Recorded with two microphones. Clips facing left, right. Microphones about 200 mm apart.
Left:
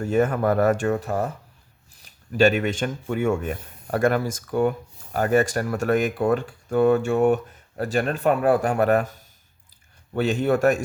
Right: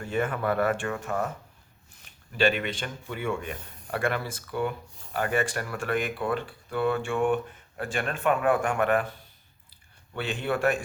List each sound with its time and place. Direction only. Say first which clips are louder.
0.0 s speech: left 7 dB; 40° left (ahead or behind)